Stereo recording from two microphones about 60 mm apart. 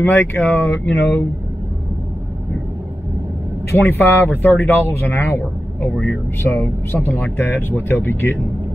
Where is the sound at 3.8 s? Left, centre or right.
Left.